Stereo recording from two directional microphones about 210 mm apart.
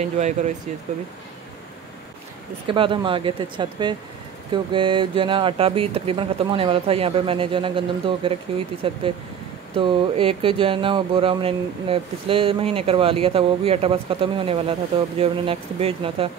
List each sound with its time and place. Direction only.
0.0 s speech: 35° right (ahead or behind)
2.6 s speech: 25° right (ahead or behind)